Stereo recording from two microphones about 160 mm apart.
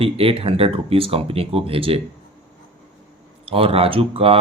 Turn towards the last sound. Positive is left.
turn(degrees=-35)  # may be behind; listen again after turning